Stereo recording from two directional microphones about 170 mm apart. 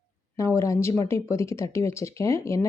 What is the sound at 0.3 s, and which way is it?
Speech, 15° left (ahead or behind).